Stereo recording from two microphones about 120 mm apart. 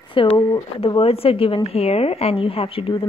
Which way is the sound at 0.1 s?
45° left (ahead or behind).